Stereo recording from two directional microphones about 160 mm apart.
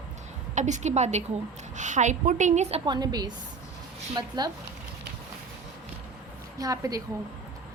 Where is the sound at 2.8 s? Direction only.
25° right (ahead or behind).